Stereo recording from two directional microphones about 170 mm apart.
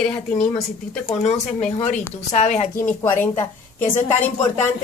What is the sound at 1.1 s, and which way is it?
Speech, 40° left (ahead or behind).